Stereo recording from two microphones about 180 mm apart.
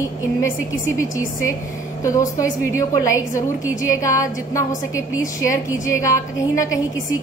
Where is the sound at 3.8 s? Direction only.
20° left (ahead or behind).